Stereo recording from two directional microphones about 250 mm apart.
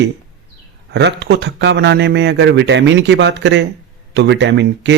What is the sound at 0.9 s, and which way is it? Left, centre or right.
A man's voice, right.